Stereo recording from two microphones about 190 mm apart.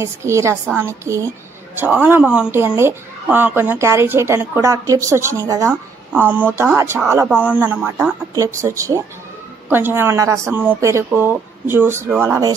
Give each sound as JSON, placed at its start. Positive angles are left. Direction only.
{"t": 0.0, "sound": "a woman's voice", "side_deg": -15}